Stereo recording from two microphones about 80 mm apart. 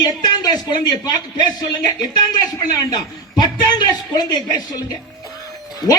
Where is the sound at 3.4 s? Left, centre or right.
Left.